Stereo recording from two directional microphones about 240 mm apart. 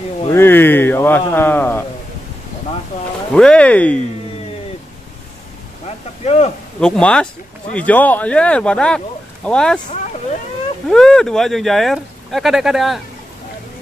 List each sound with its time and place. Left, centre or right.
0.3 s speech: centre
3.3 s speech: centre
6.2 s speech: left
6.8 s speech: centre
10.9 s speech: centre